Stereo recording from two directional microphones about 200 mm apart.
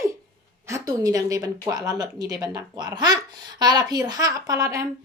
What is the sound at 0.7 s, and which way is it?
A woman's voice, 15° right (ahead or behind).